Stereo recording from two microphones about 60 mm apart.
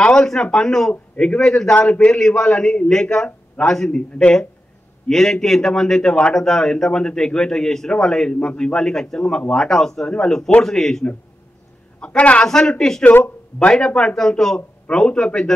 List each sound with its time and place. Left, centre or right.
0.0 s a man's voice: centre
3.3 s a sound: centre
3.7 s a man's voice: centre
12.0 s a man's voice: centre